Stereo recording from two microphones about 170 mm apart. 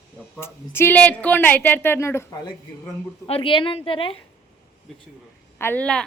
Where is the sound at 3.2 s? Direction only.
35° left (ahead or behind).